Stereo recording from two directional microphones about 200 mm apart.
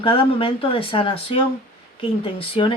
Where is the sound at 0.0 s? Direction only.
25° left (ahead or behind).